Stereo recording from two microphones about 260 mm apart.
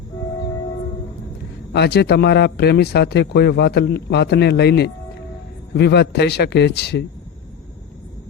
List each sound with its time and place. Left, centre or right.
1.7 s speech: left